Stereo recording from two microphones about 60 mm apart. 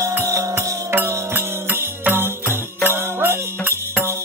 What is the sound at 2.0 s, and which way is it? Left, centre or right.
Music, right.